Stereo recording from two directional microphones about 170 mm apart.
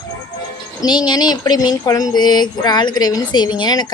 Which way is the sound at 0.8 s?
25° left (ahead or behind).